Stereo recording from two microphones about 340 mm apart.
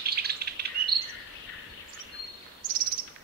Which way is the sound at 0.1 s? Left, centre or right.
Right.